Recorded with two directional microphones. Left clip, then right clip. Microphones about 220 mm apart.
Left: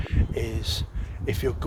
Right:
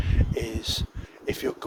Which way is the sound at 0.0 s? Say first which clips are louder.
Even; 15° right (ahead or behind).